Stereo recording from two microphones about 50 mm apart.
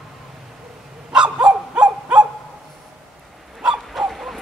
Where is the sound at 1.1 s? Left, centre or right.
Centre.